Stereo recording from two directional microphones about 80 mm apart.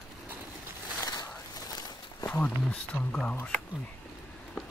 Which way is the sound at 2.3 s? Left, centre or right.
Centre.